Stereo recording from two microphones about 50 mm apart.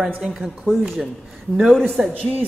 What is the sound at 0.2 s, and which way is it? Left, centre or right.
Speech, centre.